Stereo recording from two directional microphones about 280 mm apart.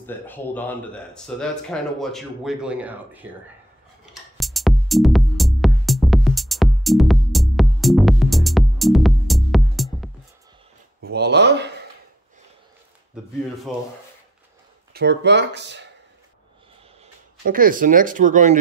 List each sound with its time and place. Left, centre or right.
0.0 s speech: centre
4.0 s music: centre
11.0 s a sound: right
13.7 s speech: centre
14.9 s speech: right
17.5 s speech: right